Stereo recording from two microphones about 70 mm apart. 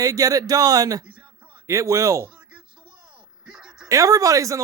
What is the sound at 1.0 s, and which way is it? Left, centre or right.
Speech, centre.